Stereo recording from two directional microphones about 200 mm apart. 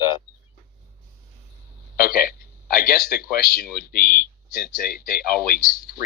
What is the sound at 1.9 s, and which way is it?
A man's voice, 50° left (ahead or behind).